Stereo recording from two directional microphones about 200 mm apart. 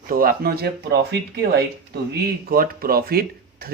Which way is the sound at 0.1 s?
45° right (ahead or behind).